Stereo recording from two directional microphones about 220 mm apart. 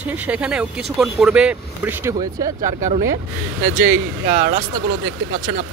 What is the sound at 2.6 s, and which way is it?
Speech, 25° right (ahead or behind).